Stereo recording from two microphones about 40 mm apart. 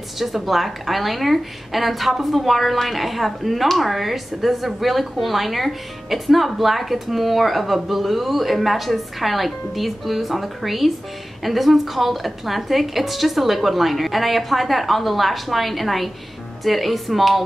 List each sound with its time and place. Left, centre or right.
0.2 s a woman's voice: centre